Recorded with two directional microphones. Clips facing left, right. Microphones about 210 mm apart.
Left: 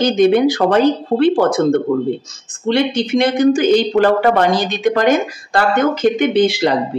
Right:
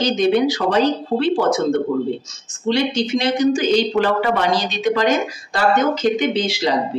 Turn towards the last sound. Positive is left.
turn(degrees=55)  # may be behind; listen again after turning